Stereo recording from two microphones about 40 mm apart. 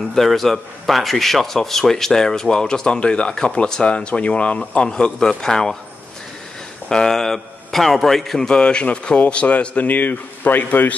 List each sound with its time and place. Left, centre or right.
0.1 s a man's voice: centre; by 4.8 s left
4.8 s a man's voice: centre
6.9 s a man's voice: centre; by 11.0 s left